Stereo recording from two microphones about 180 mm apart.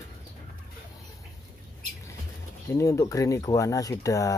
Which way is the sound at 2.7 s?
15° left (ahead or behind).